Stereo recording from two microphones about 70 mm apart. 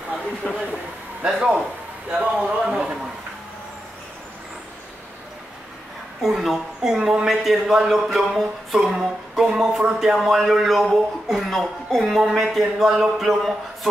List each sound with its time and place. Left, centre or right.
0.4 s speech: left
1.2 s a man's voice: centre
6.2 s a man's voice: centre